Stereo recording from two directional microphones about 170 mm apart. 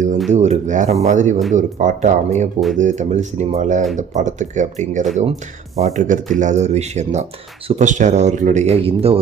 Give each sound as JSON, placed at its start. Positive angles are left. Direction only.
{"t": 0.3, "sound": "speech", "side_deg": -40}